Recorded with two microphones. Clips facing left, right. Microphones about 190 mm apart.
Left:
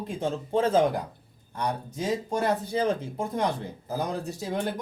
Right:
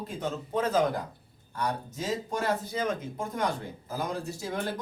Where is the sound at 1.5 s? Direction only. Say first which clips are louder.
Left 2 dB; 15° left (ahead or behind).